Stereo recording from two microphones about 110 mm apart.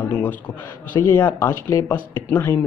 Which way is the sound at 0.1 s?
15° left (ahead or behind).